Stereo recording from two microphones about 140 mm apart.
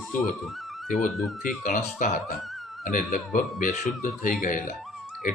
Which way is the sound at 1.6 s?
65° left (ahead or behind).